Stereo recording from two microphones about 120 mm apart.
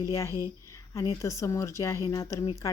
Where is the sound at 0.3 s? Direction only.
25° right (ahead or behind).